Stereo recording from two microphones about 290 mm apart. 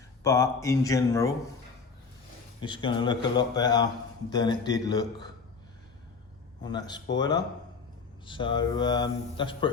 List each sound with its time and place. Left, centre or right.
0.2 s a man's voice: centre
2.6 s a man's voice: centre
6.7 s a man's voice: centre